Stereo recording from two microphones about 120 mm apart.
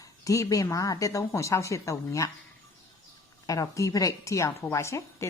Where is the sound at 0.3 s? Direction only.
30° left (ahead or behind).